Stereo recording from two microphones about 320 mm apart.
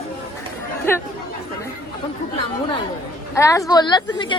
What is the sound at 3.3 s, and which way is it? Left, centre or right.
Speech, centre.